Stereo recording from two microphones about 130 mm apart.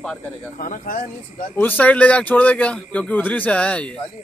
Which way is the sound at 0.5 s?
90° left.